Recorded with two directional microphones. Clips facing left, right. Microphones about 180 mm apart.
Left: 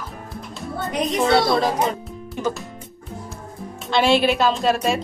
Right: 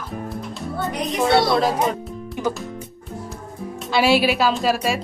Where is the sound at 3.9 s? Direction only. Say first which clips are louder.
Even; 5° right (ahead or behind).